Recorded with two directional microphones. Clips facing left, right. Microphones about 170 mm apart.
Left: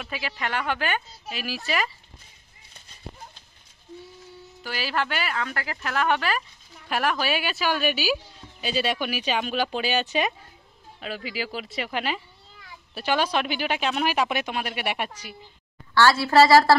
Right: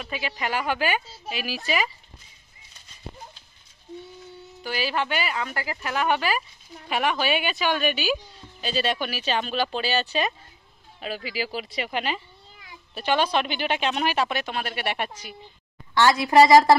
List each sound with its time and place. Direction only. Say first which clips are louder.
0.0 s a woman's voice: right 1 dB; centre (ahead or behind)
4.6 s a woman's voice: right 2 dB; centre (ahead or behind); by 10.3 s 15° left (ahead or behind)
11.0 s a woman's voice: right 1 dB; 5° right (ahead or behind)
14.2 s speech: left 1 dB; 15° left (ahead or behind)
15.9 s a woman's voice: even; 15° right (ahead or behind)